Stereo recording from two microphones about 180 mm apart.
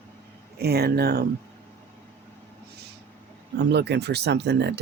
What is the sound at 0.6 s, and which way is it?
Speech, 60° right (ahead or behind).